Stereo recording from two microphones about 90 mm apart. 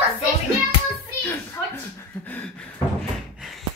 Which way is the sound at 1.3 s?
25° left (ahead or behind).